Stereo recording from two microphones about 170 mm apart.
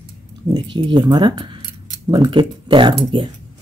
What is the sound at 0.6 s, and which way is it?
Speech, 25° right (ahead or behind).